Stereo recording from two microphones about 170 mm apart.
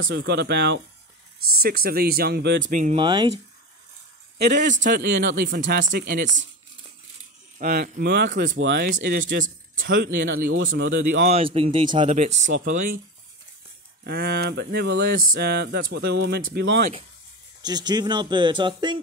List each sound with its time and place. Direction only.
0.1 s speech: 85° right
1.6 s speech: 65° right (ahead or behind); by 2.6 s 80° right
2.6 s speech: 50° right (ahead or behind)
3.0 s speech: 30° right (ahead or behind)
4.4 s speech: 75° right (ahead or behind)
5.2 s speech: 55° right (ahead or behind)
7.5 s speech: 55° right (ahead or behind); by 9.2 s 75° right (ahead or behind)
9.3 s speech: 60° right (ahead or behind)
10.9 s speech: 90° right
11.2 s speech: 35° right (ahead or behind)
12.5 s speech: 50° right (ahead or behind)
14.0 s a sound: 75° right (ahead or behind)
17.6 s speech: 25° right (ahead or behind)